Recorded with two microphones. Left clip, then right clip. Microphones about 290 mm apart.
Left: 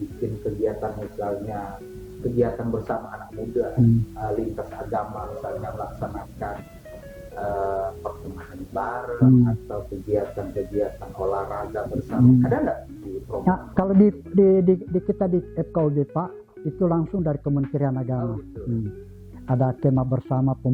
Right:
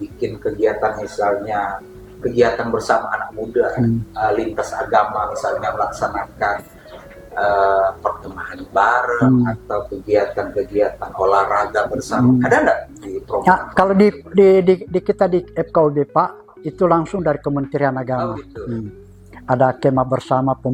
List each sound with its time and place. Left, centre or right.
0.4 s speech: centre